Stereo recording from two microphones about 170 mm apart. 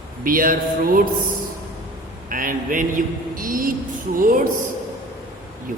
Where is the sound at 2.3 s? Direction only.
50° right (ahead or behind).